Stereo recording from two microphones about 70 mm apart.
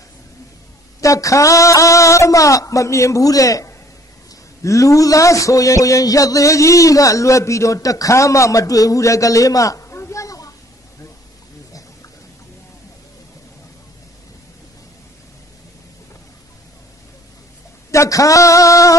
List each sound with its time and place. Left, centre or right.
1.0 s a man's voice: left
9.8 s a sound: left
17.9 s a man's voice: left